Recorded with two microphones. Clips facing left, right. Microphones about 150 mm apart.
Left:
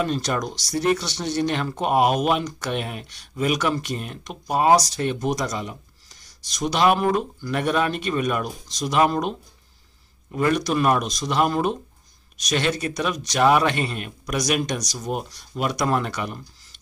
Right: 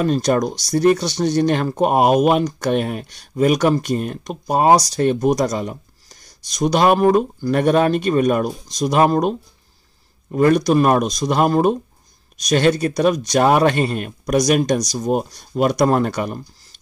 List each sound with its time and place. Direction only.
0.0 s speech: 40° right (ahead or behind)
10.3 s speech: 40° right (ahead or behind)